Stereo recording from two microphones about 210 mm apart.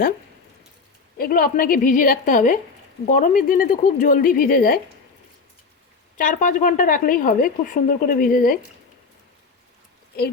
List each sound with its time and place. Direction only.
1.2 s speech: 45° left (ahead or behind)
6.1 s speech: 40° left (ahead or behind)